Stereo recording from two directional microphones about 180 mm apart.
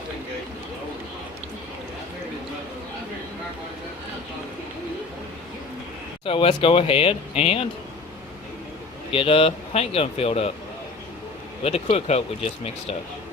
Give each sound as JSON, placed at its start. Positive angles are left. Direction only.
{"t": 6.2, "sound": "speech", "side_deg": 30}
{"t": 9.1, "sound": "speech", "side_deg": 30}
{"t": 11.6, "sound": "speech", "side_deg": 35}